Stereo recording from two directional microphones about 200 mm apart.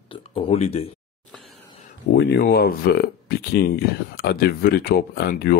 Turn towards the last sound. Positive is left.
turn(degrees=50)  # may be behind; listen again after turning